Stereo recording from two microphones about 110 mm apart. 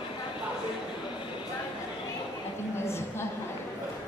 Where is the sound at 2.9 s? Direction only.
25° left (ahead or behind).